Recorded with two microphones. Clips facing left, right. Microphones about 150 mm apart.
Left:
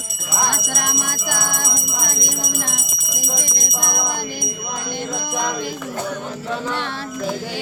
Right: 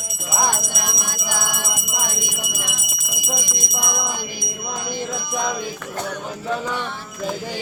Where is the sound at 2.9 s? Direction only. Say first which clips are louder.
Left 1 dB; 10° right (ahead or behind).